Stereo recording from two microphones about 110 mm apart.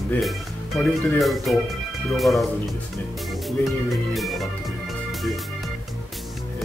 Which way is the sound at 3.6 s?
Centre (ahead or behind).